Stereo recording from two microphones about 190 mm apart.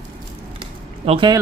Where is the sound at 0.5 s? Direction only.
30° right (ahead or behind).